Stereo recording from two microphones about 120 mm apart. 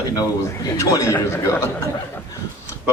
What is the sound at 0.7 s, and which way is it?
Speech, 25° left (ahead or behind).